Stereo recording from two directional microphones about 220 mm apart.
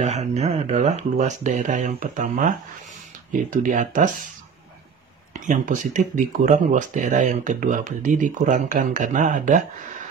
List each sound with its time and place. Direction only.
0.0 s speech: 30° right (ahead or behind)
5.3 s speech: 35° right (ahead or behind)